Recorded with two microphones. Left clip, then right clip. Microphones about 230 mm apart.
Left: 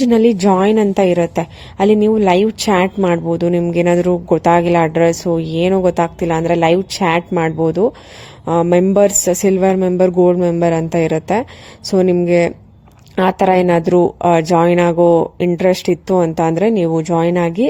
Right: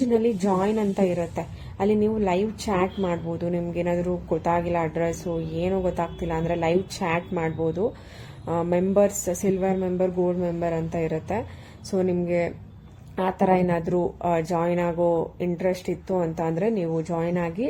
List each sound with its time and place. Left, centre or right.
0.0 s a woman's voice: left